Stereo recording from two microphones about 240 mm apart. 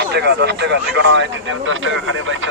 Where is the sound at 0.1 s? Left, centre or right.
Right.